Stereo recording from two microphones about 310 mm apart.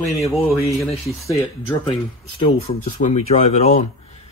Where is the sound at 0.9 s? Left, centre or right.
Centre.